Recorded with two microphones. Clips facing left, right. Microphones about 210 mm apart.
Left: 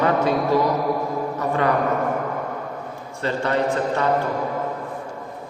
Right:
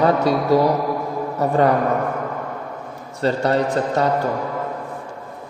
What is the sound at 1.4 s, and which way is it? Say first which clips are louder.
Speech: right 6 dB; 35° right (ahead or behind).